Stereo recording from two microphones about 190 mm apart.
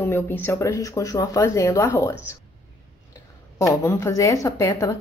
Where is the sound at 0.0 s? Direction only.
10° left (ahead or behind).